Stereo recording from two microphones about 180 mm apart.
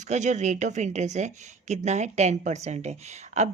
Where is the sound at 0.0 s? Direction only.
40° right (ahead or behind).